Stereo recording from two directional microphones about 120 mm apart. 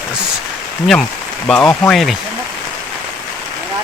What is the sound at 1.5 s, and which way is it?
Speech, 10° left (ahead or behind).